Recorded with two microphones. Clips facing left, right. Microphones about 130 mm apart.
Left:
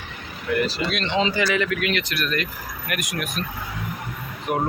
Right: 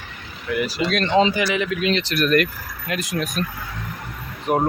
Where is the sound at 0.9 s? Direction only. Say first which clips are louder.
Right 6 dB; 45° right (ahead or behind).